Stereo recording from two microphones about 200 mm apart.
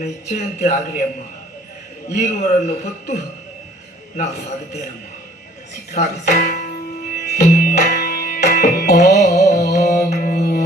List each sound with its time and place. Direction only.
0.0 s speech: 45° left (ahead or behind)
2.1 s speech: 45° left (ahead or behind)
5.9 s speech: 45° left (ahead or behind)
7.1 s music: 50° left (ahead or behind)
9.6 s mantra: 50° left (ahead or behind)
10.1 s music: 45° left (ahead or behind)